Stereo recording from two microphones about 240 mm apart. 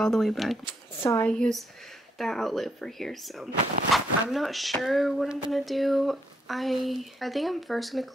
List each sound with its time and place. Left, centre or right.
0.0 s speech: centre